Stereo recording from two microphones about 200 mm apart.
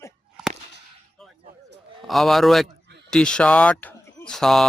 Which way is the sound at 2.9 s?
60° right (ahead or behind).